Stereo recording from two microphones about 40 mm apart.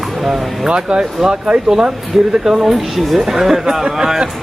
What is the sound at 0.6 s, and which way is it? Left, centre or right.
Speech, right.